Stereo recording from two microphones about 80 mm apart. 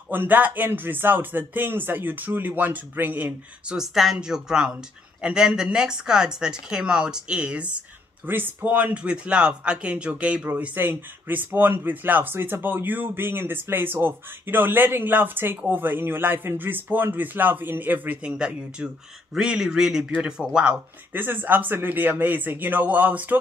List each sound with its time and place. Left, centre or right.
0.1 s speech: right
3.6 s speech: centre
8.3 s speech: right
10.6 s speech: right
21.1 s speech: right